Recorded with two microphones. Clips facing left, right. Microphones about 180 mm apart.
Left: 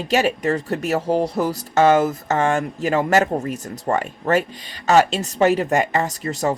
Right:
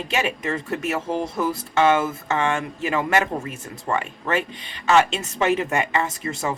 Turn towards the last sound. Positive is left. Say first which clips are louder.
# left 4 dB
turn(degrees=40)  # may be behind; listen again after turning